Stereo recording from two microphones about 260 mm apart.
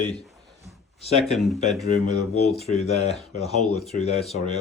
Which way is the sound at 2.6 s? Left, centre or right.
Left.